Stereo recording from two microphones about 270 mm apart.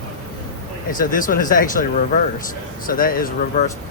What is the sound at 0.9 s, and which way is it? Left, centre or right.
Speech, left.